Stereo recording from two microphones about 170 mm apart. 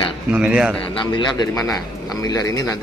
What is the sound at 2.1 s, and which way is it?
Speech, 20° left (ahead or behind).